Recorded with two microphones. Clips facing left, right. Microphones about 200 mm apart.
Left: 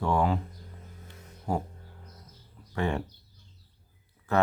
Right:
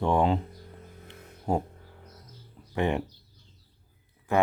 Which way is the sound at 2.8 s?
20° right (ahead or behind).